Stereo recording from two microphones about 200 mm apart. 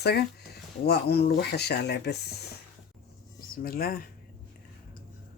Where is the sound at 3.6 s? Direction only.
50° left (ahead or behind).